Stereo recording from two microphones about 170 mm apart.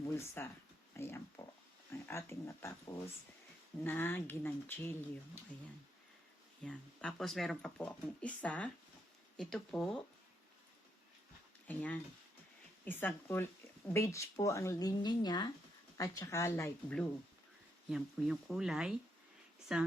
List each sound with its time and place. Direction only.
0.0 s speech: 15° left (ahead or behind)
6.7 s speech: 5° left (ahead or behind)
11.7 s speech: 10° left (ahead or behind)
17.8 s speech: centre (ahead or behind)
19.5 s a sound: 5° right (ahead or behind)